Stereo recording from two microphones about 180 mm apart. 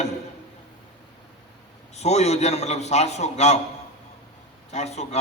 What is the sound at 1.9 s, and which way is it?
A man's voice, 35° left (ahead or behind).